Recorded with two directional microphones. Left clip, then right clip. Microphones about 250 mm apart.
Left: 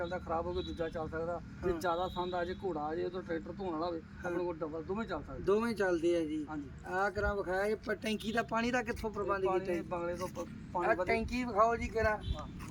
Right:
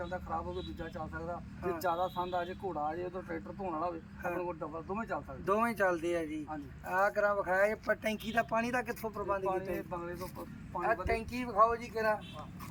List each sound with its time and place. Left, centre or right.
0.0 s speech: centre
5.5 s a man's voice: centre